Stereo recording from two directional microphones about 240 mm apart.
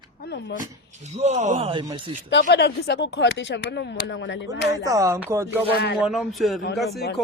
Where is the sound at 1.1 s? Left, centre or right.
Right.